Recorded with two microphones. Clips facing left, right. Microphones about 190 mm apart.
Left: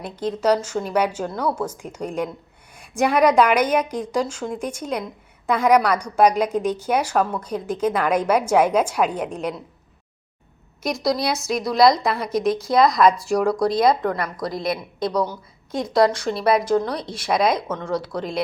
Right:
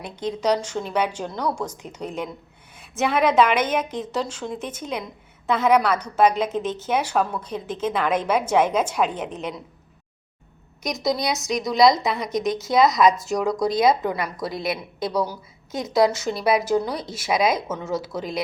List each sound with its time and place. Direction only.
0.0 s a woman's voice: 5° left (ahead or behind)
10.8 s a woman's voice: centre (ahead or behind)